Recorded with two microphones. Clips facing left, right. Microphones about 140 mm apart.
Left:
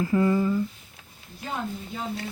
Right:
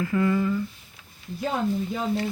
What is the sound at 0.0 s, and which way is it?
Speech, 25° left (ahead or behind).